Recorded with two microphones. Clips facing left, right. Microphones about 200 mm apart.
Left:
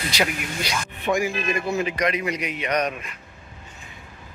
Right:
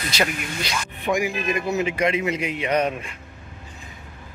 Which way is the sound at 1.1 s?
15° right (ahead or behind).